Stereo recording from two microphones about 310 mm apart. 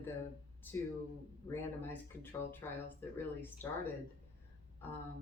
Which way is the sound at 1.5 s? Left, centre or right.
Centre.